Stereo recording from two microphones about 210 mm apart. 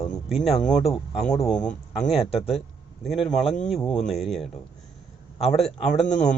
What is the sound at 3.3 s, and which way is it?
Speech, 30° left (ahead or behind).